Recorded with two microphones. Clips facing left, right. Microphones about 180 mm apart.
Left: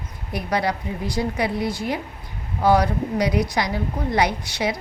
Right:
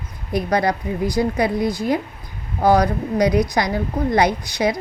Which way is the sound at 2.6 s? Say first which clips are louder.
Right 2 dB; 40° right (ahead or behind).